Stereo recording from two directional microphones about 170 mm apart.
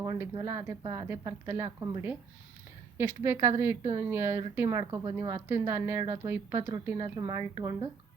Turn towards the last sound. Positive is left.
turn(degrees=-20)  # may be behind; listen again after turning